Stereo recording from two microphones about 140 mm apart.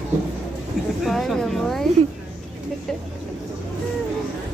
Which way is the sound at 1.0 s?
Centre (ahead or behind).